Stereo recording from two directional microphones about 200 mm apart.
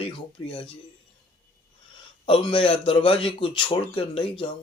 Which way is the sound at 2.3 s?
25° left (ahead or behind).